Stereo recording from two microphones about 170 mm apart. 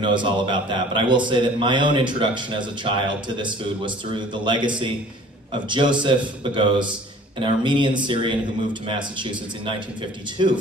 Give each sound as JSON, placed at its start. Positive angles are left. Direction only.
{"t": 0.0, "sound": "a man's voice", "side_deg": -25}